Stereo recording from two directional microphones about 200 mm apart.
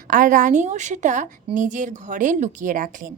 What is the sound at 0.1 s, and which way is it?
A woman's voice, 40° right (ahead or behind).